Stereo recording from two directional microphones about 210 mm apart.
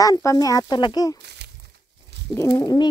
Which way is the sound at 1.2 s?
55° right (ahead or behind).